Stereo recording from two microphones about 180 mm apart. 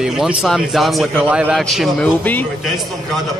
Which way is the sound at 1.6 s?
5° left (ahead or behind).